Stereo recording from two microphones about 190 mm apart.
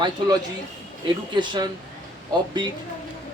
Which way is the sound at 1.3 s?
25° right (ahead or behind).